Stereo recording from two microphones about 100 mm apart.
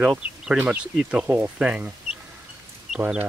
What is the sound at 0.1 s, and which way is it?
Speech, 10° right (ahead or behind).